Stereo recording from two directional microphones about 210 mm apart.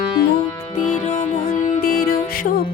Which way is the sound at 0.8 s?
35° left (ahead or behind).